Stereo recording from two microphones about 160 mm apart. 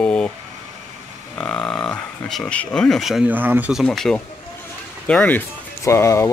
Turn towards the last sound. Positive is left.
turn(degrees=15)  # may be behind; listen again after turning